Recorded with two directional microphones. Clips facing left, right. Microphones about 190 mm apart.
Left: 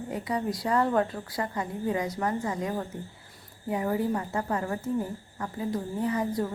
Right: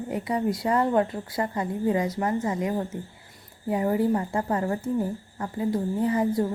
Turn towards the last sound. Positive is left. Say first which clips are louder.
# right 4 dB
turn(degrees=-25)  # may be behind; listen again after turning